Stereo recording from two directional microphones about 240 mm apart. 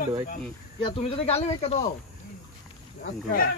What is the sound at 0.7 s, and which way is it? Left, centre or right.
Speech, left.